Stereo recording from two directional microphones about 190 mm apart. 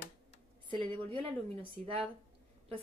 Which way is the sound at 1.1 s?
30° right (ahead or behind).